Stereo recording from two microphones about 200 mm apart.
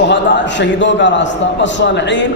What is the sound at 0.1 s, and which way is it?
A man's voice, 60° left (ahead or behind).